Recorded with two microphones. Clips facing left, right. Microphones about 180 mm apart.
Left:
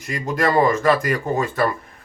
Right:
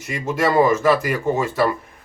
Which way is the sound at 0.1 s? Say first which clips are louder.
Even; 5° right (ahead or behind).